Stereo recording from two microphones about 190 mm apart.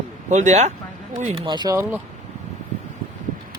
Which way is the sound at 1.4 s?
25° right (ahead or behind).